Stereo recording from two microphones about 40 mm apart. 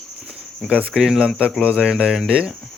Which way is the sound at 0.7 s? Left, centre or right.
Right.